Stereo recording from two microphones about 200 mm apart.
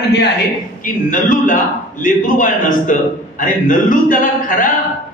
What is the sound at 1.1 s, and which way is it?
A man's voice, 40° left (ahead or behind).